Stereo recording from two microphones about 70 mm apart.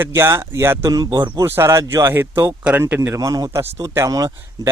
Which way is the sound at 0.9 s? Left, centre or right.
Right.